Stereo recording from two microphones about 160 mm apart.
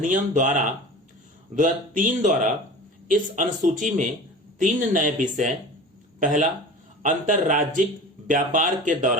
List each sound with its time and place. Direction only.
0.0 s speech: 55° right (ahead or behind)